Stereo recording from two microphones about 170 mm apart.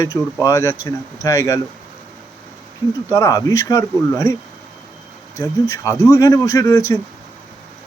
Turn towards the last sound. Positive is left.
turn(degrees=20)  # may be behind; listen again after turning